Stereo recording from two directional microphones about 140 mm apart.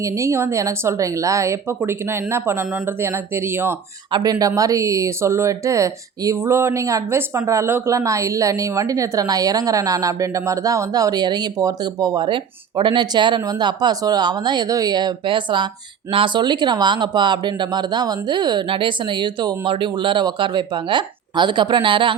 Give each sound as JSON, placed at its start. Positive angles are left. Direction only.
{"t": 0.0, "sound": "speech", "side_deg": -20}
{"t": 4.1, "sound": "speech", "side_deg": -25}